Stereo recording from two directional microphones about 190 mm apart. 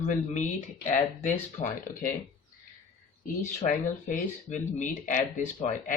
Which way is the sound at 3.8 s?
40° left (ahead or behind).